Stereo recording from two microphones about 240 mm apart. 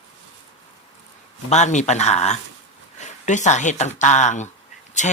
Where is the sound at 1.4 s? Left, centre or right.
Left.